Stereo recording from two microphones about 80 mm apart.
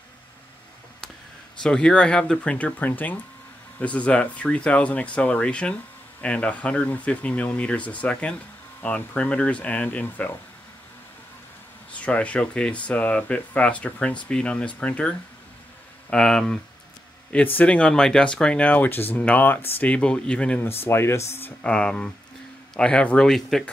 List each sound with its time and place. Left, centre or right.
1.6 s speech: centre
11.9 s speech: centre
20.6 s speech: left
21.6 s speech: centre